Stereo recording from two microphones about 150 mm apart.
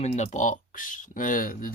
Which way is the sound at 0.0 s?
50° left (ahead or behind).